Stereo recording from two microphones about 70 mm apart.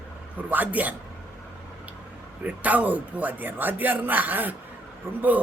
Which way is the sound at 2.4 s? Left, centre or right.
Right.